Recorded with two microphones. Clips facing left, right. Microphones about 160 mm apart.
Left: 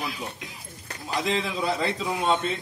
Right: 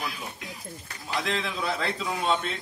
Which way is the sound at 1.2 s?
Centre (ahead or behind).